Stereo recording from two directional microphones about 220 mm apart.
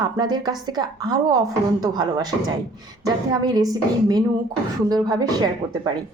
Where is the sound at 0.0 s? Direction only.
20° right (ahead or behind).